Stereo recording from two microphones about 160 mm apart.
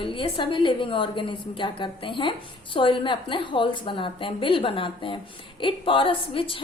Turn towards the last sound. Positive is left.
turn(degrees=35)  # may be behind; listen again after turning